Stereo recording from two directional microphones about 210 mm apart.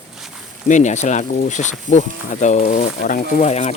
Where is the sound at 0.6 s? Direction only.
35° left (ahead or behind).